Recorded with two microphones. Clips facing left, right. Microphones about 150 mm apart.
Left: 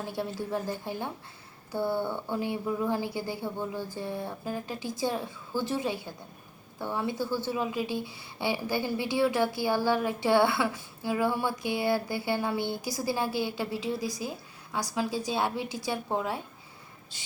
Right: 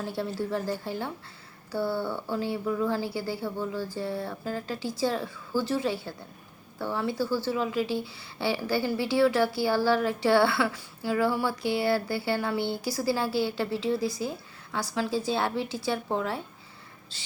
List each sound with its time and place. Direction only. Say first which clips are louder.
0.1 s a woman's voice: right 1 dB; 15° left (ahead or behind)